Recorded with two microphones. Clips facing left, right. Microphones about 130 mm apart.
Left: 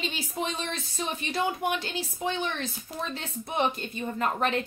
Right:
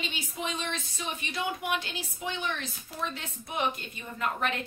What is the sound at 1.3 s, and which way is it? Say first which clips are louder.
Speech: left 3 dB; 35° left (ahead or behind).